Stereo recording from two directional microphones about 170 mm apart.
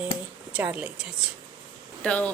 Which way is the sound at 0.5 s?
10° right (ahead or behind).